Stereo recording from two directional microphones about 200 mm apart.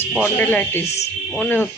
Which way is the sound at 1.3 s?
10° left (ahead or behind).